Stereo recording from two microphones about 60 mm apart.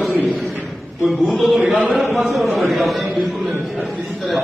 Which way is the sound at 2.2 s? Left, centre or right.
Centre.